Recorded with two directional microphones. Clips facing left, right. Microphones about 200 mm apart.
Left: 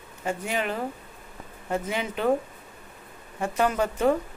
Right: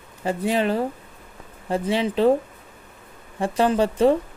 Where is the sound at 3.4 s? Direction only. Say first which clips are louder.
Right 5 dB; 30° right (ahead or behind).